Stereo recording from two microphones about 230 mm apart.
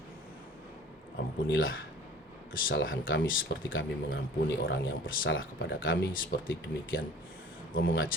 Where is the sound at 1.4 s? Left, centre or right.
Left.